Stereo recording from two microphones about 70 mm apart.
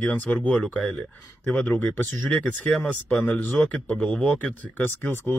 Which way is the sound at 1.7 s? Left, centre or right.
Left.